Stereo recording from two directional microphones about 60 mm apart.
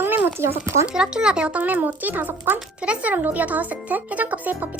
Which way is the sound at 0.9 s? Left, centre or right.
Centre.